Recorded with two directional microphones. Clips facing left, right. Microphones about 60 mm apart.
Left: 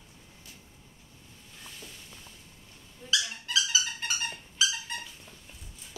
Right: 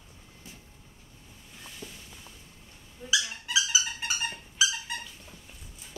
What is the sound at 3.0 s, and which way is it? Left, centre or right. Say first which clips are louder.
Dog: right 2 dB; centre.